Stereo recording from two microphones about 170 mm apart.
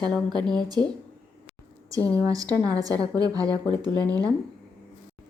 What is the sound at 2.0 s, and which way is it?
Speech, 10° left (ahead or behind).